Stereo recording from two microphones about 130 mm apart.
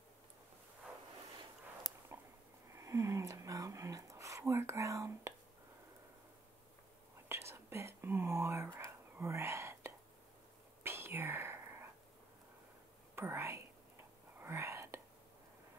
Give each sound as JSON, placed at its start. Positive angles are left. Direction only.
{"t": 2.1, "sound": "a sound", "side_deg": -20}
{"t": 7.2, "sound": "whispering", "side_deg": -20}
{"t": 13.1, "sound": "whispering", "side_deg": -20}